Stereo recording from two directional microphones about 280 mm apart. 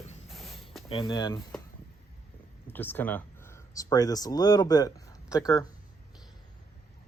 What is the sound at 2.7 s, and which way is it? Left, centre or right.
Speech, centre.